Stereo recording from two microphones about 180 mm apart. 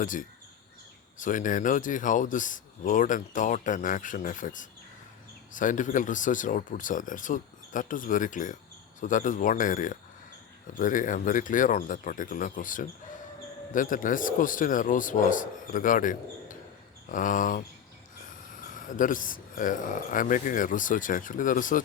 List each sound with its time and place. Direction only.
0.0 s speech: 45° left (ahead or behind)
18.7 s speech: 45° left (ahead or behind)